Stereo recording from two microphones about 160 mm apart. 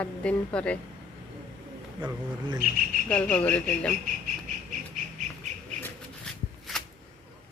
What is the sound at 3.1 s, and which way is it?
Speech, 5° left (ahead or behind).